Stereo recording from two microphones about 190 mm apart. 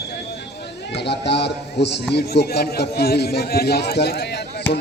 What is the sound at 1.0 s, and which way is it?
A man's voice, 60° left (ahead or behind).